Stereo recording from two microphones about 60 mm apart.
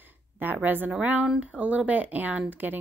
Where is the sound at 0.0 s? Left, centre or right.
Right.